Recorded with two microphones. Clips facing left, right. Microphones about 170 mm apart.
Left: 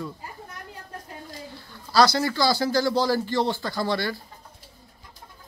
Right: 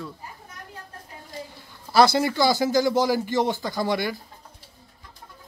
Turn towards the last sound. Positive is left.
turn(degrees=-15)  # may be behind; listen again after turning